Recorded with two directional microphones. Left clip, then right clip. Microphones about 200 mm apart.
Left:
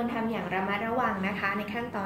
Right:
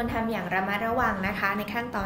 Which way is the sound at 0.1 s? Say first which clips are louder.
Right 3 dB; 30° right (ahead or behind).